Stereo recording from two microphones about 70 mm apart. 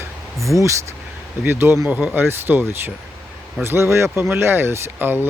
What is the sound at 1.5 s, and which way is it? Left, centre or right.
Speech, right.